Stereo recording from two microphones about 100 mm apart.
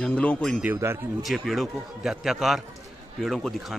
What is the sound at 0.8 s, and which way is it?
Speech, 25° right (ahead or behind).